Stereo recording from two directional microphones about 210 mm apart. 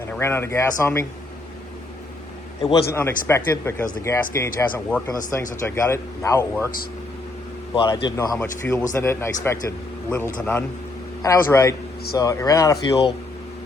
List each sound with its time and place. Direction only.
0.1 s speech: 10° left (ahead or behind)
2.9 s speech: 10° left (ahead or behind)
7.7 s a man's voice: 20° left (ahead or behind)